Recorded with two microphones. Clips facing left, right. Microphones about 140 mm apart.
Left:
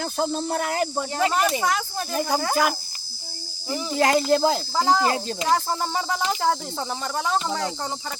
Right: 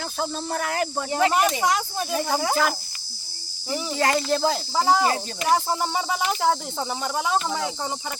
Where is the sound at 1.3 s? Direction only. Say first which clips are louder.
Right 1 dB; 15° right (ahead or behind).